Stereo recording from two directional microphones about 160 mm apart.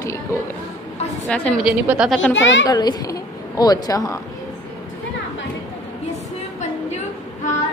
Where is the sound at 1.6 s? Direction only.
5° right (ahead or behind).